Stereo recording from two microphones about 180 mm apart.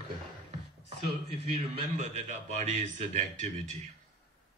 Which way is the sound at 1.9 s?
40° right (ahead or behind).